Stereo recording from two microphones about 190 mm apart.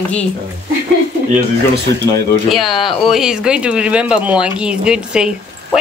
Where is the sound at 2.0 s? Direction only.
15° left (ahead or behind).